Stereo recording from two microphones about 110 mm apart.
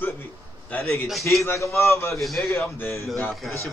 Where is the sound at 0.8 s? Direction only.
25° left (ahead or behind).